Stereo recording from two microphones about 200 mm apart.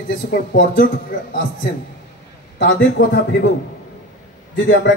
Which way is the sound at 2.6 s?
55° left (ahead or behind).